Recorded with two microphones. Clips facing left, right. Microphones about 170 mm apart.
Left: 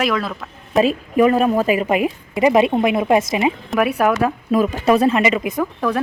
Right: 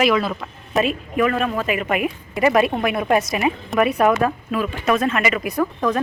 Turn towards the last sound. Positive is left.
turn(degrees=5)  # may be behind; listen again after turning